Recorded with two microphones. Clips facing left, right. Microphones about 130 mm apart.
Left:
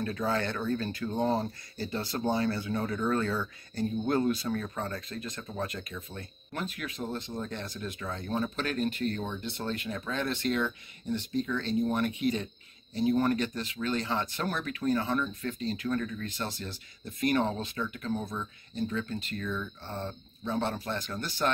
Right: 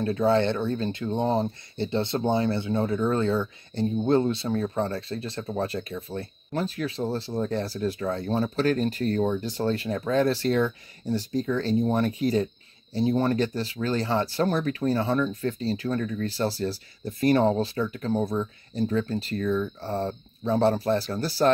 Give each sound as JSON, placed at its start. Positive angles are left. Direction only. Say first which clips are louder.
{"t": 0.0, "sound": "speech", "louder": "right 8 dB", "side_deg": -30}